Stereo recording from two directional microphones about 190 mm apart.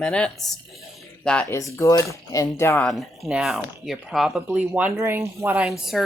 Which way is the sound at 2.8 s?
Centre (ahead or behind).